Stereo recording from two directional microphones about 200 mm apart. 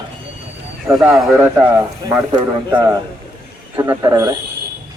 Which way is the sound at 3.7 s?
15° right (ahead or behind).